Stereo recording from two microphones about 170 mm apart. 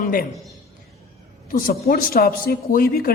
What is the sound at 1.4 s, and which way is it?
A man's voice, 55° left (ahead or behind).